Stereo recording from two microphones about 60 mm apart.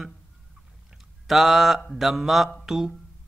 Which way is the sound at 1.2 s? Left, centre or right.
Centre.